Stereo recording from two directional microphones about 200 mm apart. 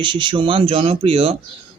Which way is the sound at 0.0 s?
25° right (ahead or behind).